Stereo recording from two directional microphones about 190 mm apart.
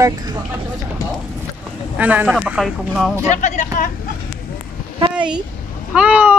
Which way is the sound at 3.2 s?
40° left (ahead or behind).